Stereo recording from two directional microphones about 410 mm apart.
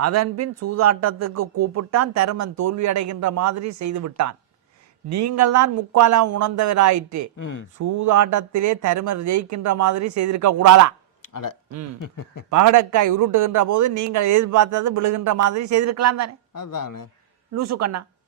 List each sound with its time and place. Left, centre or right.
0.0 s a man's voice: right
7.3 s speech: left
7.8 s a man's voice: right
11.2 s a sound: left
11.9 s speech: left
12.5 s a man's voice: right
16.6 s speech: left
17.5 s speech: right